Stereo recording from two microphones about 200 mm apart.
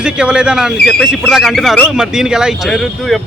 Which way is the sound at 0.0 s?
5° right (ahead or behind).